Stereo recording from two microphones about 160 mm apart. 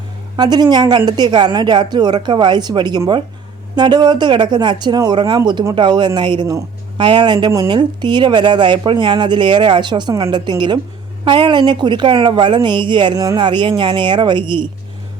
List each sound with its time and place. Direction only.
0.3 s speech: 25° right (ahead or behind)